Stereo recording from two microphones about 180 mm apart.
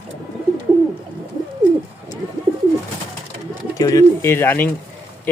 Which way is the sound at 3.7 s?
20° left (ahead or behind).